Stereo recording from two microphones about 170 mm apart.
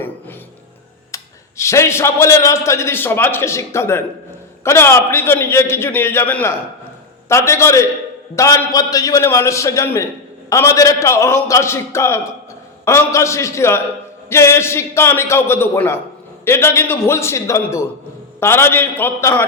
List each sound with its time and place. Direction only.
1.1 s a man's voice: 15° left (ahead or behind)